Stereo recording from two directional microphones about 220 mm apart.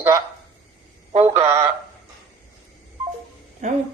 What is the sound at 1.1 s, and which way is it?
Speech, 30° right (ahead or behind).